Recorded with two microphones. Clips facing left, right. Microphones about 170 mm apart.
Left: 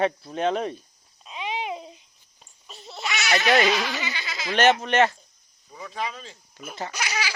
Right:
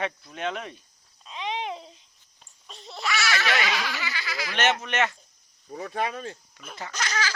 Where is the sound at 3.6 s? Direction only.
20° left (ahead or behind).